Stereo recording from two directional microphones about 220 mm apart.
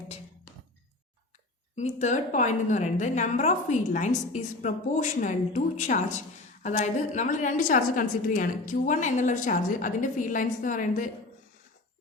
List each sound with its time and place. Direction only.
1.7 s a woman's voice: 30° left (ahead or behind)